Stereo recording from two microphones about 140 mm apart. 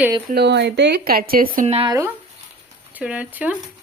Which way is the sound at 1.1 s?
90° right.